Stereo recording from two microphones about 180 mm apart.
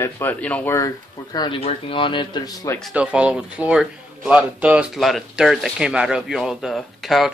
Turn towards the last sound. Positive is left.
turn(degrees=0)  # may be behind; listen again after turning